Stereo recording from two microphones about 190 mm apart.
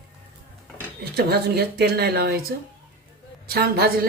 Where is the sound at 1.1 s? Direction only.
55° right (ahead or behind).